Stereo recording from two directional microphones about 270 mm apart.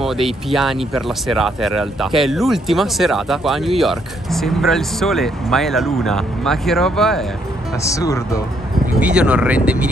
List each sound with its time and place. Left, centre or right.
0.0 s speech: centre
9.0 s speech: centre